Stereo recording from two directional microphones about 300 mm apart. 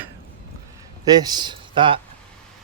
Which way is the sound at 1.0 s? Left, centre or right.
Centre.